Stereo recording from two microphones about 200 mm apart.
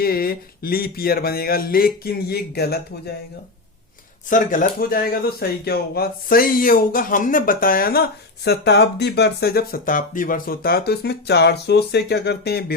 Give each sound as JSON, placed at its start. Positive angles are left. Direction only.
{"t": 0.0, "sound": "speech", "side_deg": 50}
{"t": 4.3, "sound": "speech", "side_deg": 45}